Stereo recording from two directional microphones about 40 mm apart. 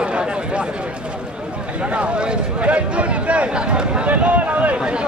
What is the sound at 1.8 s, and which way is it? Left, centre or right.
A man's voice, right.